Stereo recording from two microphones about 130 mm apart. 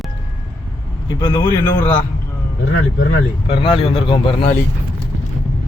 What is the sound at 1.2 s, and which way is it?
Speech, 35° left (ahead or behind).